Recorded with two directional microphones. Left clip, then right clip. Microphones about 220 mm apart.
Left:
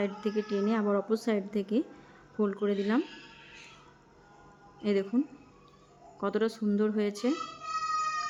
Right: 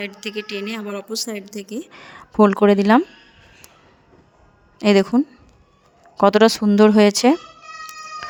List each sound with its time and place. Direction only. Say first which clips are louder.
0.0 s speech: right 4 dB; 50° right (ahead or behind)
0.8 s speech: right 2 dB; centre (ahead or behind)
1.4 s speech: even; 50° right (ahead or behind)
4.8 s speech: right 13 dB; 50° right (ahead or behind)